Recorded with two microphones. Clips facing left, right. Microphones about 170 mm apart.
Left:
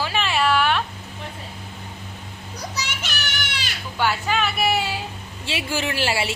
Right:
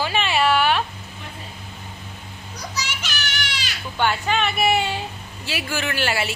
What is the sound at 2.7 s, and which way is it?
Children playing, 60° left (ahead or behind).